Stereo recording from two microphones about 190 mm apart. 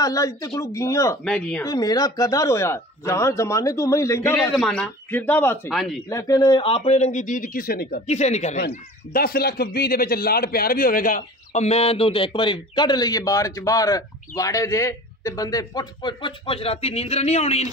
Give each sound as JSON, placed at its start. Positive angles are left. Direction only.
{"t": 0.0, "sound": "speech", "side_deg": 15}
{"t": 1.2, "sound": "speech", "side_deg": 5}
{"t": 1.6, "sound": "speech", "side_deg": 20}
{"t": 4.6, "sound": "speech", "side_deg": 5}
{"t": 5.7, "sound": "speech", "side_deg": 0}
{"t": 6.0, "sound": "speech", "side_deg": 15}
{"t": 8.1, "sound": "speech", "side_deg": 35}
{"t": 8.5, "sound": "speech", "side_deg": 55}